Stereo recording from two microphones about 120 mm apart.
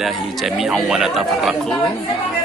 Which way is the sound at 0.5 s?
Centre (ahead or behind).